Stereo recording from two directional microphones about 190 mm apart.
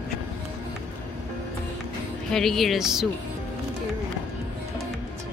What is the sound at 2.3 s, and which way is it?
Speech, centre (ahead or behind).